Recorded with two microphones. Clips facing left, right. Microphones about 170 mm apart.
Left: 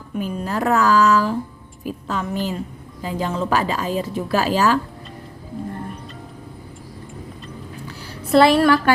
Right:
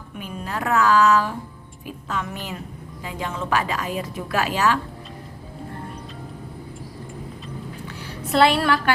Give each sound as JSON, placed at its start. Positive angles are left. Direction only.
{"t": 0.2, "sound": "a woman's voice", "side_deg": 40}
{"t": 8.3, "sound": "a woman's voice", "side_deg": 40}